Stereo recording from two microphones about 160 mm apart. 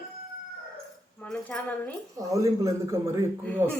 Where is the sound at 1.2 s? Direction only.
5° left (ahead or behind).